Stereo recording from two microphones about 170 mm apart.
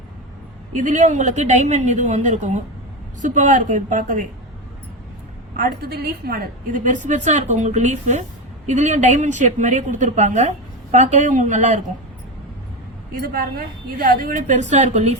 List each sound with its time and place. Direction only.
0.8 s a woman's voice: 45° right (ahead or behind)
5.5 s a woman's voice: 65° right (ahead or behind); by 11.8 s 45° right (ahead or behind)
13.1 s a woman's voice: 60° right (ahead or behind); by 15.1 s 45° right (ahead or behind)